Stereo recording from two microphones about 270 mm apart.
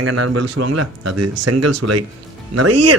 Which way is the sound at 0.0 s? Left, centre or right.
Right.